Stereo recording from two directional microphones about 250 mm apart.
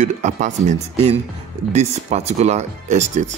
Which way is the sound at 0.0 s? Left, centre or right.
Right.